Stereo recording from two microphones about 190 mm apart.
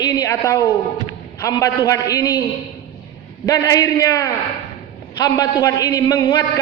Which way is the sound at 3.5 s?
15° left (ahead or behind).